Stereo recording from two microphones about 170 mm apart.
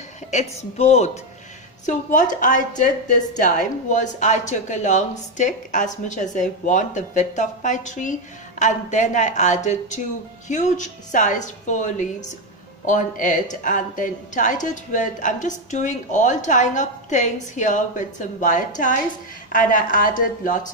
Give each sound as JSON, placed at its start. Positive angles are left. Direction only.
{"t": 0.3, "sound": "a woman's voice", "side_deg": 40}